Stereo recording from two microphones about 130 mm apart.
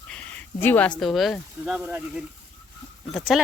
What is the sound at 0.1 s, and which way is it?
Speech, 10° left (ahead or behind).